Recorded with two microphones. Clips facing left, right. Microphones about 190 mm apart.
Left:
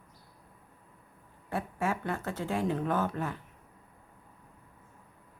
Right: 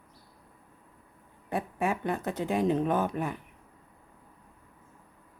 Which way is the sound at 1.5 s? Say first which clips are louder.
Right 2 dB; 15° right (ahead or behind).